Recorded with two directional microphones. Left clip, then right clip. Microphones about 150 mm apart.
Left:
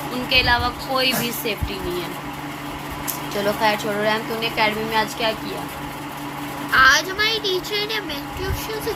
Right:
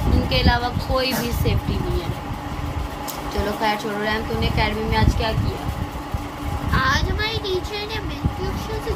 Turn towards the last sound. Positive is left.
turn(degrees=-30)  # may be behind; listen again after turning